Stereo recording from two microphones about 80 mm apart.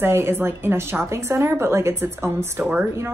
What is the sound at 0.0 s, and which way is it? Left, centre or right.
Speech, right.